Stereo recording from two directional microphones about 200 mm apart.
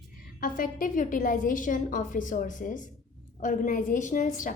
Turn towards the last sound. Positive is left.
turn(degrees=40)  # may be behind; listen again after turning